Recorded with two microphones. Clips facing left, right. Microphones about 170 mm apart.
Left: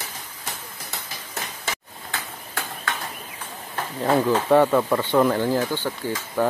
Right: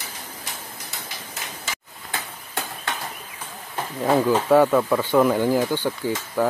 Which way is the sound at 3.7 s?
5° right (ahead or behind).